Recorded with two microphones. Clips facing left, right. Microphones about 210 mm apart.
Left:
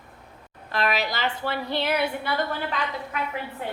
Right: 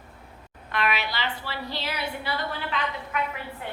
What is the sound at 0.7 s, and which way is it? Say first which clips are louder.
A woman's voice: left 2 dB; 35° left (ahead or behind).